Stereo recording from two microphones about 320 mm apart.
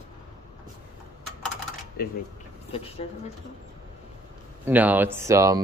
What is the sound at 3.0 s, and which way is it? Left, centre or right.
Speech, centre.